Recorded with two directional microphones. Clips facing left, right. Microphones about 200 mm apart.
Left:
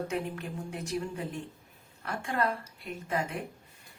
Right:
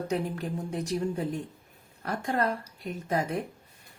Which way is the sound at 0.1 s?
35° right (ahead or behind).